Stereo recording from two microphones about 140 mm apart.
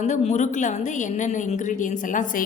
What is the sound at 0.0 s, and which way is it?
A woman's voice, 55° left (ahead or behind).